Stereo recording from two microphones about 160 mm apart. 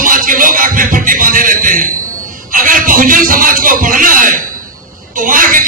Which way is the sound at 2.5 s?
60° right (ahead or behind).